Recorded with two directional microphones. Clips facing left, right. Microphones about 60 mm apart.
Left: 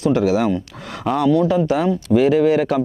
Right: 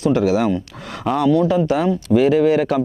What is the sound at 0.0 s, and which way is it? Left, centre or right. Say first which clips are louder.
Speech: even; right.